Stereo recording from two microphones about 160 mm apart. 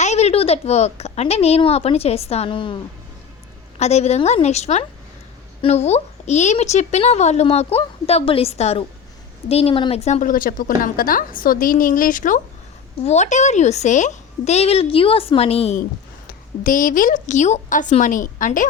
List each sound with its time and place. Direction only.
0.0 s a woman's voice: 45° left (ahead or behind)
3.8 s a woman's voice: 45° left (ahead or behind)
16.6 s a woman's voice: 60° left (ahead or behind)